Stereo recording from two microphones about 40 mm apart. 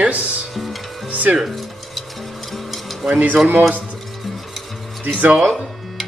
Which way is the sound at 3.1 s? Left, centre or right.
Right.